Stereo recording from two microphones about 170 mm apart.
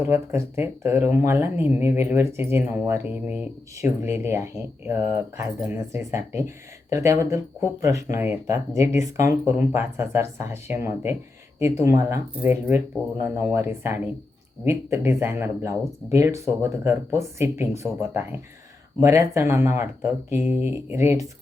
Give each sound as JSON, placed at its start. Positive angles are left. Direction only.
{"t": 0.0, "sound": "speech", "side_deg": -15}